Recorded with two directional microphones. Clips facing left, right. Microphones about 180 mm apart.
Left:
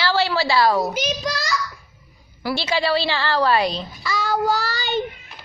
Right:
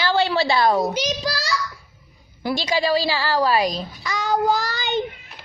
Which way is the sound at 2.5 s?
15° right (ahead or behind).